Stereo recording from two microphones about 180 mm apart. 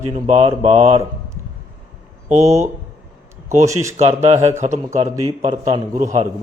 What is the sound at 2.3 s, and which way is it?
Speech, 40° right (ahead or behind).